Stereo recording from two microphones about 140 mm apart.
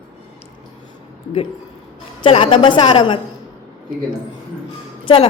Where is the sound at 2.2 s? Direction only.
35° left (ahead or behind).